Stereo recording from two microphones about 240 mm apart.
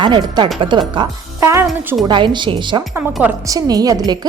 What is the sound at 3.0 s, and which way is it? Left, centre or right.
A woman's voice, centre.